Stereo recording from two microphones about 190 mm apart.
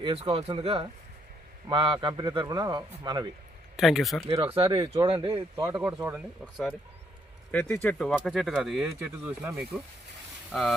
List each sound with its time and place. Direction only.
0.0 s a man's voice: 30° right (ahead or behind)
3.8 s speech: centre (ahead or behind)
4.2 s a man's voice: 30° right (ahead or behind)
5.6 s speech: 10° right (ahead or behind)
6.4 s speech: 5° left (ahead or behind)